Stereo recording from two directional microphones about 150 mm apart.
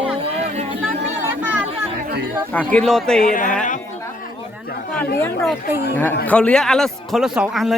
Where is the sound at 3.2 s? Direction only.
65° left (ahead or behind).